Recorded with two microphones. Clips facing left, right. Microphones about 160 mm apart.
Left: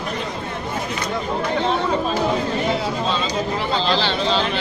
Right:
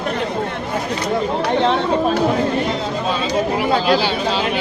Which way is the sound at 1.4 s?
70° right (ahead or behind).